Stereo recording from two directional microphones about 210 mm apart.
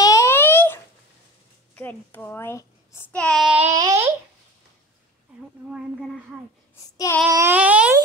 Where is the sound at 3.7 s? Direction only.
15° right (ahead or behind).